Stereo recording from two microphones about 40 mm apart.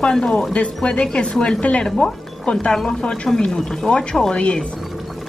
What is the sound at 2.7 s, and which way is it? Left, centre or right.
Speech, centre.